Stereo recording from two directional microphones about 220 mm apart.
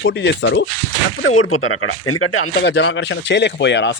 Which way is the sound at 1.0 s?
65° left (ahead or behind).